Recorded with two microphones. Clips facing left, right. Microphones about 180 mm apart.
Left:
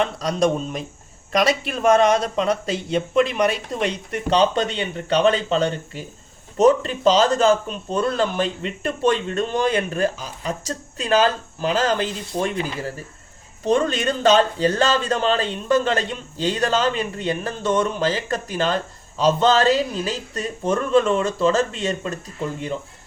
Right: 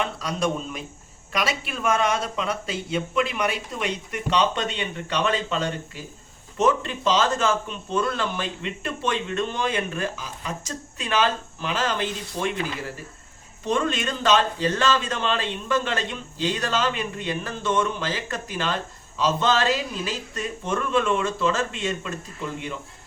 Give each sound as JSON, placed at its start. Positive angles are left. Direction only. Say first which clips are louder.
{"t": 0.0, "sound": "a man's voice", "louder": "left 6 dB", "side_deg": 40}
{"t": 13.7, "sound": "a man's voice", "louder": "left 5 dB", "side_deg": 40}